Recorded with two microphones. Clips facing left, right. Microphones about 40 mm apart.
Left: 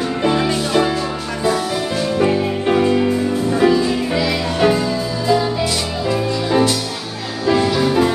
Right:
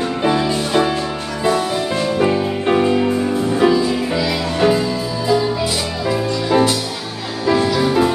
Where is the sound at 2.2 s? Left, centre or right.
Centre.